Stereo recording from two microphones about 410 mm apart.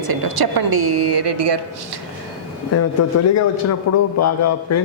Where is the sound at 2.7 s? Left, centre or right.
Left.